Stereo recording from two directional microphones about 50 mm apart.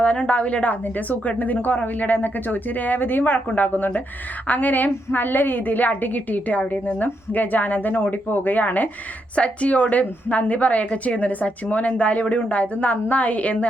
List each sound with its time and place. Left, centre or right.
0.0 s a woman's voice: left